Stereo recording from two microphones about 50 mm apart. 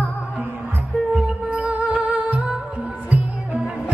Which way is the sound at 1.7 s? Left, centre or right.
Right.